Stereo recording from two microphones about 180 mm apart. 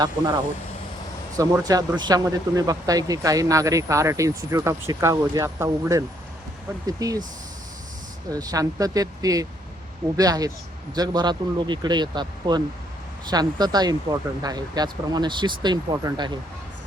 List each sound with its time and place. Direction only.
1.4 s speech: 20° right (ahead or behind)
8.3 s speech: 20° right (ahead or behind)